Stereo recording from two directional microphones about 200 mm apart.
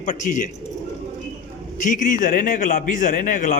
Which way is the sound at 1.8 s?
40° left (ahead or behind).